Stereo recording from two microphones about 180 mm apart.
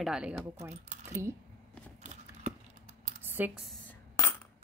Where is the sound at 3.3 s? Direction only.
10° right (ahead or behind).